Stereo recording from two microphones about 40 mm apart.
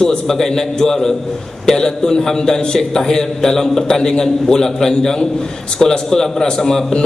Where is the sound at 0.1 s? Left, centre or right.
Centre.